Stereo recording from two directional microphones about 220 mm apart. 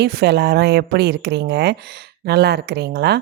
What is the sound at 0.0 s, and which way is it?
A woman's voice, 50° right (ahead or behind).